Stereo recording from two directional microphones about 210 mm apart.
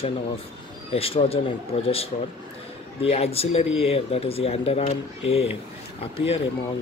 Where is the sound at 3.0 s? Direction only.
30° left (ahead or behind).